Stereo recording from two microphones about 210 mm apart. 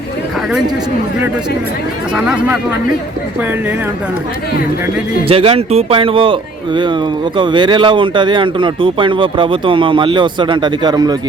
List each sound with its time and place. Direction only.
2.1 s speech: 5° right (ahead or behind)
5.3 s speech: 25° right (ahead or behind)